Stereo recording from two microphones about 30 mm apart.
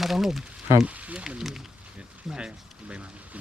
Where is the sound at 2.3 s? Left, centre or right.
Right.